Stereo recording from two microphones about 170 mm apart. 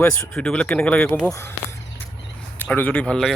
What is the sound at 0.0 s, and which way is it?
Speech, 5° left (ahead or behind).